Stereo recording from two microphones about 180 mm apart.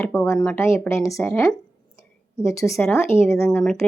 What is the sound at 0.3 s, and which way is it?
Speech, 10° left (ahead or behind).